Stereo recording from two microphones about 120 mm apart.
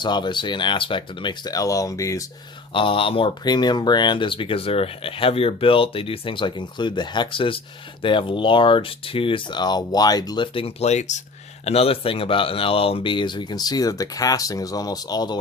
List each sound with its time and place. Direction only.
0.0 s speech: 40° left (ahead or behind)
2.7 s speech: 50° left (ahead or behind); by 11.2 s 70° left (ahead or behind)
11.6 s speech: 55° left (ahead or behind); by 15.4 s 35° left (ahead or behind)